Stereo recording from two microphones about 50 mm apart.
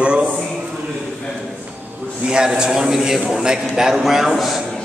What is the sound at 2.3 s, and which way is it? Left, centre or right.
A man's voice, centre.